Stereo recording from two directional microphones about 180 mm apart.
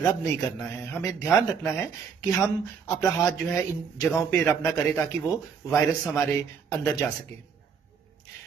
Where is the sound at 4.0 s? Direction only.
15° left (ahead or behind).